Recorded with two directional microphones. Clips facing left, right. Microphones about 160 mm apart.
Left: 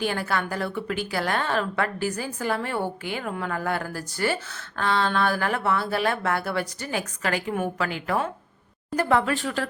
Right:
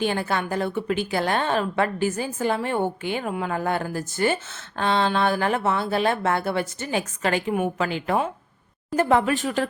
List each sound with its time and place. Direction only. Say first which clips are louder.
0.0 s a woman's voice: right 2 dB; 20° right (ahead or behind)